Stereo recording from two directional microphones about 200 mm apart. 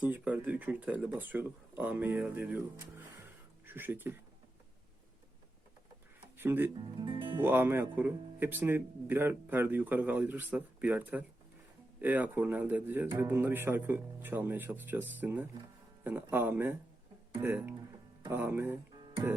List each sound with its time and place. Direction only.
0.0 s speech: 10° right (ahead or behind)
6.3 s speech: 10° right (ahead or behind)
6.9 s speech: 25° right (ahead or behind)
7.3 s speech: 10° right (ahead or behind)